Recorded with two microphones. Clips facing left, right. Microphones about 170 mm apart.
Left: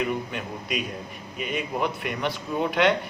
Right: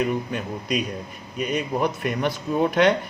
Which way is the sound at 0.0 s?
40° right (ahead or behind).